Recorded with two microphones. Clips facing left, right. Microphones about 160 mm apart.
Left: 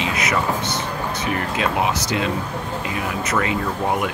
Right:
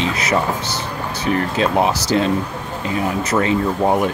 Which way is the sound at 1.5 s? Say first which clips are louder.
Right 3 dB; 35° right (ahead or behind).